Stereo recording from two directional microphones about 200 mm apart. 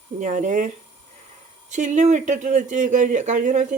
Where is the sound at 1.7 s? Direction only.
40° right (ahead or behind).